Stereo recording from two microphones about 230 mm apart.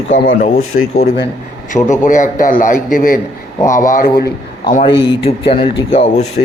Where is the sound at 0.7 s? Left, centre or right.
Left.